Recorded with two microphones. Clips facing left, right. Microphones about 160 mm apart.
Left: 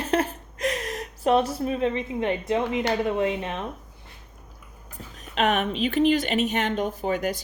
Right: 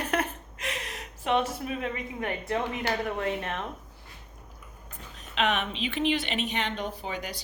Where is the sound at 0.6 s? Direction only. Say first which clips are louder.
Left 9 dB; 40° left (ahead or behind); by 3.6 s 20° left (ahead or behind).